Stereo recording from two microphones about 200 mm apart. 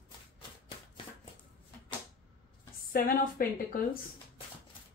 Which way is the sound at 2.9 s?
45° left (ahead or behind).